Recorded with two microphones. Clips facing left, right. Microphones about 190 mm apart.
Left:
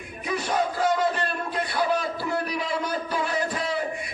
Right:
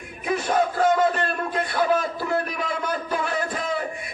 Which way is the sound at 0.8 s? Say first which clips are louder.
Right 4 dB; 50° right (ahead or behind).